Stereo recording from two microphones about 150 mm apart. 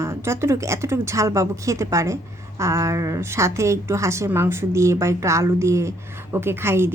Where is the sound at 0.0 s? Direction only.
20° right (ahead or behind).